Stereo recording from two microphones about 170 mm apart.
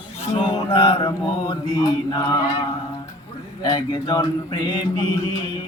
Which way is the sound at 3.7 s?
25° left (ahead or behind).